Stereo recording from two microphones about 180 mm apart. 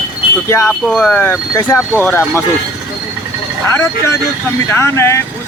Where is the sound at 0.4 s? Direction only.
15° left (ahead or behind).